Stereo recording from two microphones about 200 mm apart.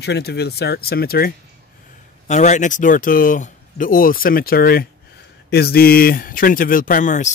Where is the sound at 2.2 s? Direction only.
35° left (ahead or behind).